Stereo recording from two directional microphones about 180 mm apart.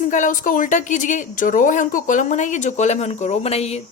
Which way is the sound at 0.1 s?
45° left (ahead or behind).